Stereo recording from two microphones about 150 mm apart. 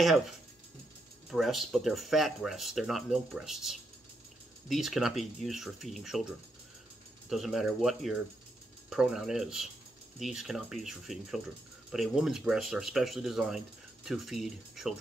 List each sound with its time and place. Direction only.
1.3 s speech: centre (ahead or behind)
7.2 s speech: centre (ahead or behind)